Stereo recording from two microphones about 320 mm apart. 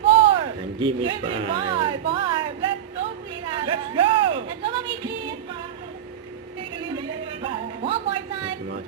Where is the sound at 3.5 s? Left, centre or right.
Centre.